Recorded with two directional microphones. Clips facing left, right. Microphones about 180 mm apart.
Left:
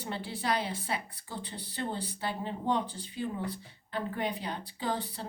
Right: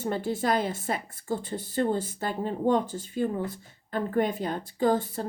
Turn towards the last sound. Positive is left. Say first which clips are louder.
# right 10 dB
turn(degrees=-45)  # may be behind; listen again after turning